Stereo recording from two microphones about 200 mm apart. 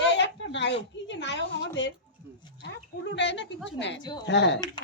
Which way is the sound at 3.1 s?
65° left (ahead or behind).